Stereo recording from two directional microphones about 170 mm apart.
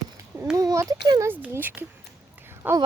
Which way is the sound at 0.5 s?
20° right (ahead or behind).